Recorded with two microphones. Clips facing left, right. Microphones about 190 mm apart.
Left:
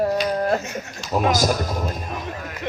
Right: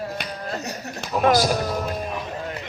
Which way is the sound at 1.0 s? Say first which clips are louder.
Left 3 dB; 55° right (ahead or behind).